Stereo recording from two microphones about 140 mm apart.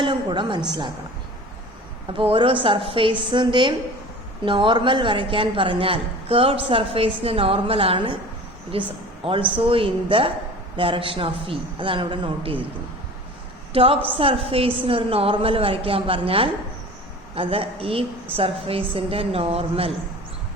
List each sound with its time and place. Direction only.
0.0 s a sound: 35° right (ahead or behind)
0.7 s a man's voice: 35° right (ahead or behind)
2.1 s a man's voice: 40° right (ahead or behind)
13.7 s a man's voice: 40° right (ahead or behind)